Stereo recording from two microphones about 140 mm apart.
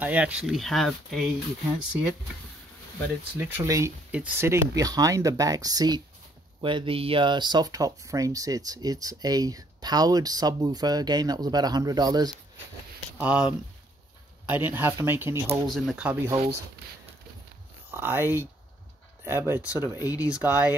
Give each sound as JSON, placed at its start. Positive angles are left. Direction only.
{"t": 0.0, "sound": "speech", "side_deg": -10}
{"t": 3.3, "sound": "speech", "side_deg": -20}
{"t": 13.2, "sound": "speech", "side_deg": -10}
{"t": 15.7, "sound": "speech", "side_deg": 0}
{"t": 17.9, "sound": "speech", "side_deg": -15}